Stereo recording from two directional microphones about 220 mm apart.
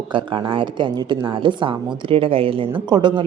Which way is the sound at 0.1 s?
20° right (ahead or behind).